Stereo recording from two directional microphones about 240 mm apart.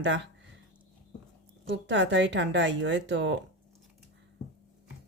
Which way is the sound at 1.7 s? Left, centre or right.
Right.